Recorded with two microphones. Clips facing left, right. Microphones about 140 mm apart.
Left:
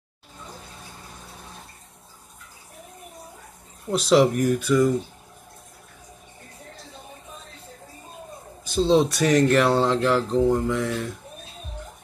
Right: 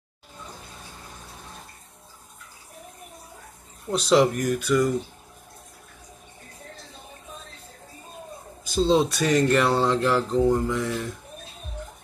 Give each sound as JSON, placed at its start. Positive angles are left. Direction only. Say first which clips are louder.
{"t": 3.9, "sound": "speech", "louder": "left 1 dB", "side_deg": 5}
{"t": 8.9, "sound": "speech", "louder": "left 3 dB", "side_deg": 0}